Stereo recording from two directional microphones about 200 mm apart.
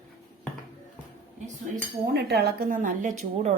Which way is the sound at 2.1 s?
55° right (ahead or behind).